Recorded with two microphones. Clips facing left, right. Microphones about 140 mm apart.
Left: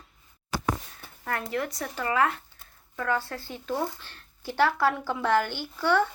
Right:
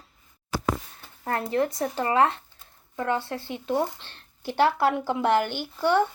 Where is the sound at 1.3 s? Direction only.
30° right (ahead or behind).